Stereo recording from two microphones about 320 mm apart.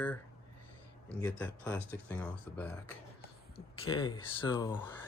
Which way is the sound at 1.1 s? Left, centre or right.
Centre.